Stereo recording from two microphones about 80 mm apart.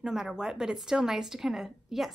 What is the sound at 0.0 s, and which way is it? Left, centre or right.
A woman's voice, centre.